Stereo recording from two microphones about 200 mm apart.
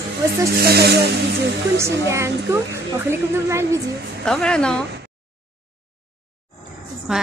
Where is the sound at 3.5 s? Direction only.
15° right (ahead or behind).